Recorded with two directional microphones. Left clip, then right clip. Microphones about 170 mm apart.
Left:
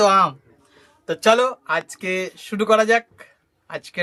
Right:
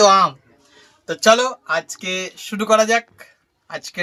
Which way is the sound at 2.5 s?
30° left (ahead or behind).